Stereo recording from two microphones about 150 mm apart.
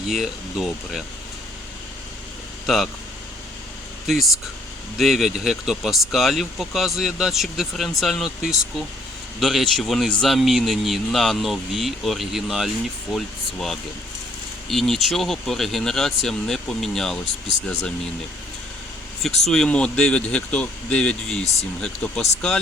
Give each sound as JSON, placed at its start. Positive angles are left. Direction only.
{"t": 0.1, "sound": "speech", "side_deg": 0}
{"t": 2.6, "sound": "speech", "side_deg": 0}
{"t": 4.0, "sound": "speech", "side_deg": 0}
{"t": 19.2, "sound": "speech", "side_deg": 5}
{"t": 21.4, "sound": "speech", "side_deg": 45}
{"t": 21.8, "sound": "speech", "side_deg": 5}